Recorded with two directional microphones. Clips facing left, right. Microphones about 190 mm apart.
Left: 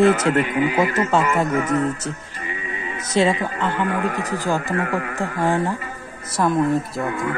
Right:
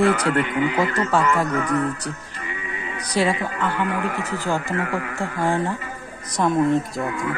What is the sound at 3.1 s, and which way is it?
Speech, 25° left (ahead or behind).